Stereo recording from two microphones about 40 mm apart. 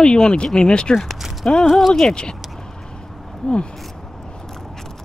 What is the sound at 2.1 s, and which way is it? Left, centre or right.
Speech, left.